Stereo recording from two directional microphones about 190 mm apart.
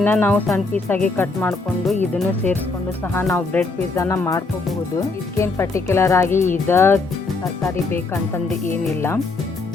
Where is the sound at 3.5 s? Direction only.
5° left (ahead or behind).